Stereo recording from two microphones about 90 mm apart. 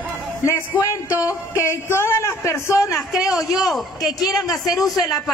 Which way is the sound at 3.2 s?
5° right (ahead or behind).